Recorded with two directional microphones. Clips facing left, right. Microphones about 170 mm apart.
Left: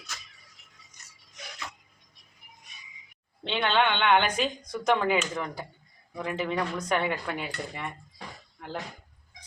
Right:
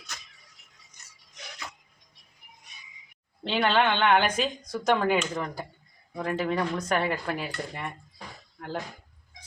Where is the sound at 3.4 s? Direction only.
Centre (ahead or behind).